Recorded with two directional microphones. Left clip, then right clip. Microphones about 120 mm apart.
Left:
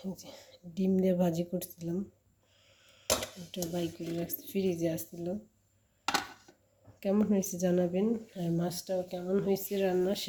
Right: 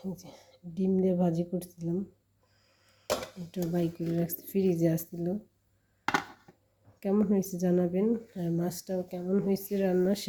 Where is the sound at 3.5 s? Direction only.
45° right (ahead or behind).